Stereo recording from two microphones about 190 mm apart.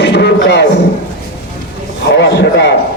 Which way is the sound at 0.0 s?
60° left (ahead or behind).